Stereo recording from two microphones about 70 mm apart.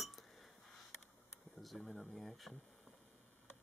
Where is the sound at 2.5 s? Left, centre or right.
Centre.